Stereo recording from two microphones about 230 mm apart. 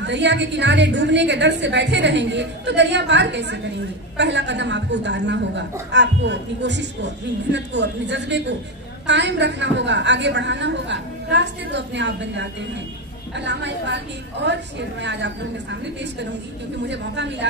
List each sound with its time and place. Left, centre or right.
0.0 s a woman's voice: right